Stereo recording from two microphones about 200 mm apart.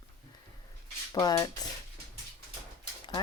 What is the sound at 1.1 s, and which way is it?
Speech, 15° left (ahead or behind).